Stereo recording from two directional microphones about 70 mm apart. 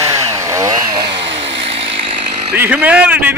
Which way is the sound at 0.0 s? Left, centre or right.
Right.